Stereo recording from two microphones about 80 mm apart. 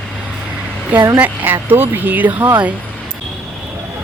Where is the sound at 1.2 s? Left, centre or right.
Right.